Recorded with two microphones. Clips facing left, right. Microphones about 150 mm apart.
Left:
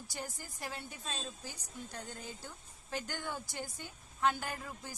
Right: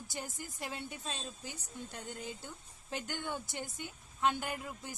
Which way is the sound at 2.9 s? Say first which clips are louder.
Right 1 dB; 20° right (ahead or behind).